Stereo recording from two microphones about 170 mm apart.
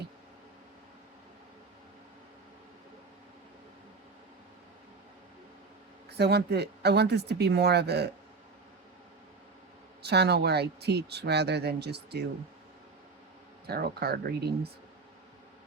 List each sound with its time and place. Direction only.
6.1 s speech: 75° right (ahead or behind)
10.0 s speech: 75° right (ahead or behind)
13.7 s speech: 65° right (ahead or behind)